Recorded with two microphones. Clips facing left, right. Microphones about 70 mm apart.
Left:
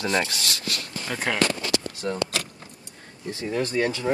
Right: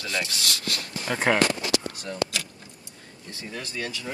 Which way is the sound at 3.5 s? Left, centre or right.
Left.